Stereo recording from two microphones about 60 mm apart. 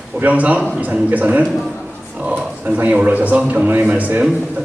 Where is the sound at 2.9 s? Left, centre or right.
Right.